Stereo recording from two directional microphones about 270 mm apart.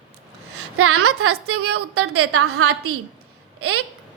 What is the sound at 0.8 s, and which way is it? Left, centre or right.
A woman's voice, right.